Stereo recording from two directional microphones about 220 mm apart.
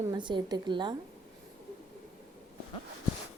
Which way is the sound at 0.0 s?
20° right (ahead or behind).